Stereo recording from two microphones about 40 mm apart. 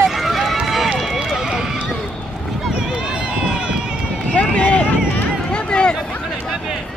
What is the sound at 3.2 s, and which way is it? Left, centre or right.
Run, right.